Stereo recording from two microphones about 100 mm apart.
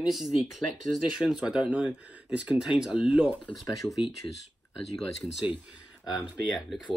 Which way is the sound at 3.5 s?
Centre (ahead or behind).